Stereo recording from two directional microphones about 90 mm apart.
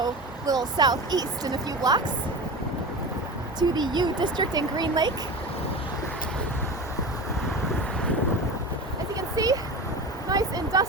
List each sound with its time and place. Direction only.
0.0 s speech: 50° right (ahead or behind)
3.6 s speech: 55° right (ahead or behind)
9.3 s speech: 45° right (ahead or behind)
10.2 s a sound: 45° right (ahead or behind)